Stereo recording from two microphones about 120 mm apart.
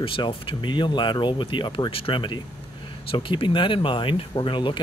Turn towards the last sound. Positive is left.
turn(degrees=45)  # may be behind; listen again after turning